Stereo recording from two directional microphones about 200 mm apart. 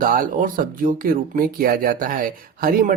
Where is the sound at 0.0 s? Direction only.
45° right (ahead or behind).